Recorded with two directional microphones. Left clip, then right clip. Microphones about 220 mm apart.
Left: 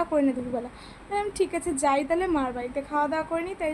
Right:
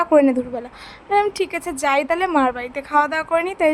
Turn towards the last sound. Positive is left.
turn(degrees=-35)  # may be behind; listen again after turning